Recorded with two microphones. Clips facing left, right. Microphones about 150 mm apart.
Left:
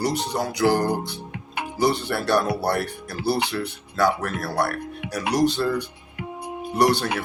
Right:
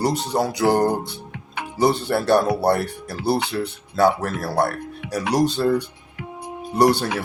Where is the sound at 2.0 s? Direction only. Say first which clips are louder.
Right 4 dB; 25° right (ahead or behind).